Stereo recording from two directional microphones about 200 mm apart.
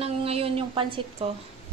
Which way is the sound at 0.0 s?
30° right (ahead or behind).